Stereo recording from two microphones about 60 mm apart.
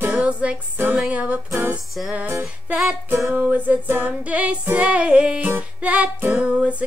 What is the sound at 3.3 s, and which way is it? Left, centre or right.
Music, right.